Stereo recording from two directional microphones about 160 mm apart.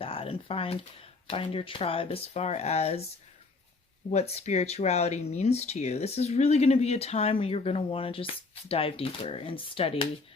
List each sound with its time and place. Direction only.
0.0 s speech: 35° left (ahead or behind)
4.1 s speech: 40° left (ahead or behind)